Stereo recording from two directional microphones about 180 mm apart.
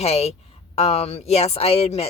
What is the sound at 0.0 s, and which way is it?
Speech, 35° left (ahead or behind).